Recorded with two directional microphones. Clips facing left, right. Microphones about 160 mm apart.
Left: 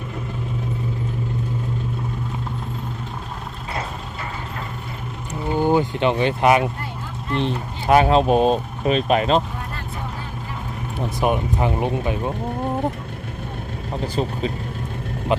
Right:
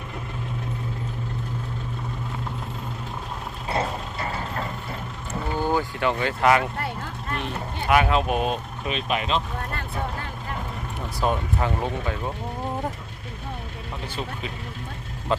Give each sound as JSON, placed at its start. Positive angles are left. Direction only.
{"t": 3.7, "sound": "vehicle", "side_deg": -30}
{"t": 5.5, "sound": "speech", "side_deg": 20}
{"t": 7.3, "sound": "speech", "side_deg": 30}
{"t": 11.2, "sound": "speech", "side_deg": 15}
{"t": 13.9, "sound": "speech", "side_deg": 35}
{"t": 15.3, "sound": "speech", "side_deg": 15}